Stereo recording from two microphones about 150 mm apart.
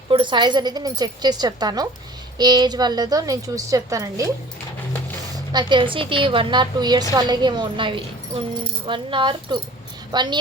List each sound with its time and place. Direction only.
0.1 s a woman's voice: 35° right (ahead or behind)
5.3 s a woman's voice: 30° right (ahead or behind)